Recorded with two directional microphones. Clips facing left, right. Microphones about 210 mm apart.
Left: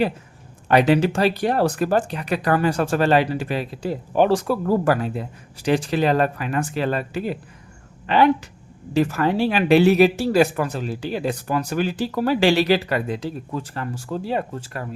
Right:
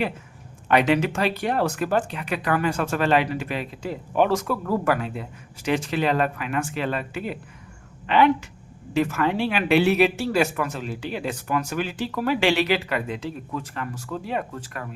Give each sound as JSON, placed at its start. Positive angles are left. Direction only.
{"t": 0.7, "sound": "speech", "side_deg": 35}